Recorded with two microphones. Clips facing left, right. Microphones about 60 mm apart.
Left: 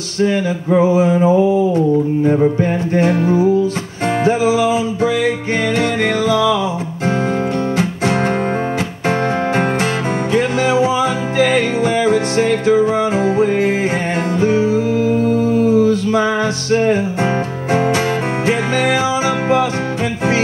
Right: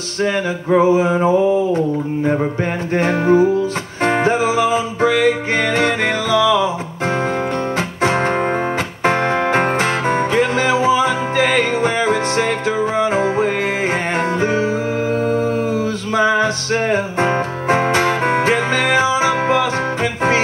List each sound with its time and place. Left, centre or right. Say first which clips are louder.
3.0 s music: right 1 dB; right
8.0 s music: right 3 dB; right